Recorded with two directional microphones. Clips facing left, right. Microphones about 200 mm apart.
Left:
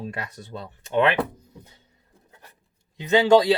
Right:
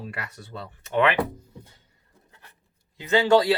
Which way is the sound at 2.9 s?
20° left (ahead or behind).